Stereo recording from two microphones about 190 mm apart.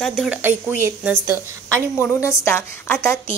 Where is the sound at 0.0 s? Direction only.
Centre (ahead or behind).